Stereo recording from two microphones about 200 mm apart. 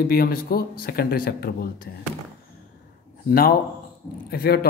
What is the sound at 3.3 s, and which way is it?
Speech, 50° left (ahead or behind).